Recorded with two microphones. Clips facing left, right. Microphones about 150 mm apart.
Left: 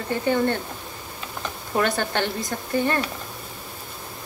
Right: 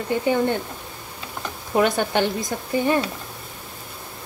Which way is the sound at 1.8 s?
15° right (ahead or behind).